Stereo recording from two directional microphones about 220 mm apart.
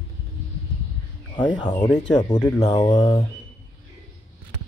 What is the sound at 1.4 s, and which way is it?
A man's voice, 20° left (ahead or behind).